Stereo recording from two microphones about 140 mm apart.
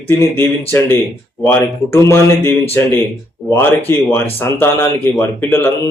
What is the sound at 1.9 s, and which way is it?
Speech, 20° left (ahead or behind).